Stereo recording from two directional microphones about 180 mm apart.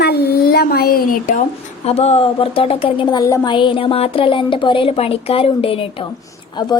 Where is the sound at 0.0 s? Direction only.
65° left (ahead or behind).